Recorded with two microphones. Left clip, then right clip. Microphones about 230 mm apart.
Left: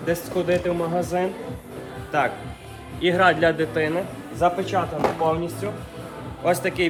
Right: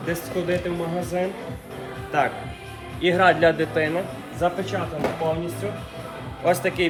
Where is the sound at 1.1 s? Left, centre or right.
Centre.